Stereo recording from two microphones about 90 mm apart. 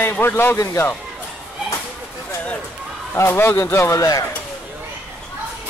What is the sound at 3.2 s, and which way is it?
A man's voice, 30° left (ahead or behind).